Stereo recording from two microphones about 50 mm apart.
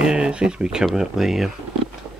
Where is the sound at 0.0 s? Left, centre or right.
Centre.